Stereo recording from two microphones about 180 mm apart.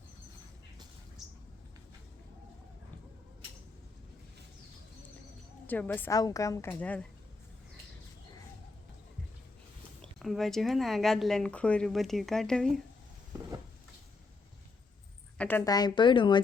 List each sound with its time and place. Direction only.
1.2 s a sound: centre (ahead or behind)
5.6 s a woman's voice: 10° left (ahead or behind)
10.0 s speech: centre (ahead or behind)
15.4 s a woman's voice: 10° left (ahead or behind)